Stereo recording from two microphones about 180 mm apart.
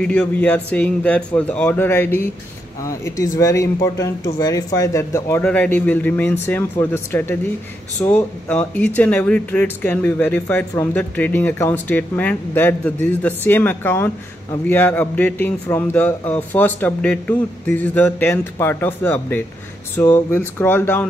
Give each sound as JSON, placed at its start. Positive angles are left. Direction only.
{"t": 0.0, "sound": "speech", "side_deg": 5}